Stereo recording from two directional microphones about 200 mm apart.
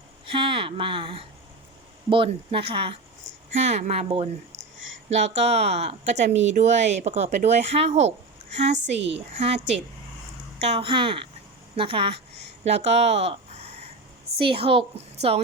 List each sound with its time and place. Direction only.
0.3 s speech: 25° right (ahead or behind)
4.5 s a sound: 70° right (ahead or behind)
5.0 s speech: 35° right (ahead or behind)
10.6 s speech: 30° right (ahead or behind)